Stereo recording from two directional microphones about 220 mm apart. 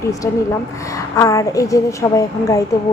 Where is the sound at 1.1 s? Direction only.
15° left (ahead or behind).